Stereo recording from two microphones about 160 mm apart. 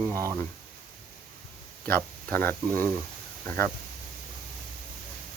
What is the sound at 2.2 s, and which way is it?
Speech, 10° left (ahead or behind).